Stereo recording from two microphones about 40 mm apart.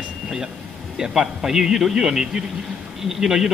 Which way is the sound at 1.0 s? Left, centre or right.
Centre.